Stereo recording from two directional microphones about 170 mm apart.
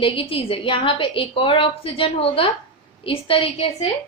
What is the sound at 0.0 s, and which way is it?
A woman's voice, 30° left (ahead or behind).